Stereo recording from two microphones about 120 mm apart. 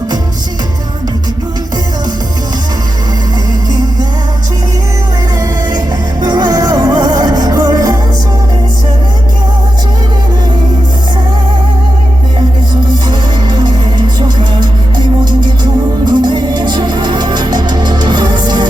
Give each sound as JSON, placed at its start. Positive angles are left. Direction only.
{"t": 6.2, "sound": "music", "side_deg": -35}
{"t": 13.1, "sound": "music", "side_deg": -40}